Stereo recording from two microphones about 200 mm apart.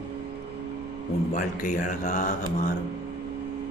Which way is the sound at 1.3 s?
40° left (ahead or behind).